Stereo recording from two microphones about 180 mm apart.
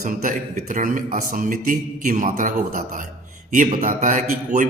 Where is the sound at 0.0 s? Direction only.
45° right (ahead or behind).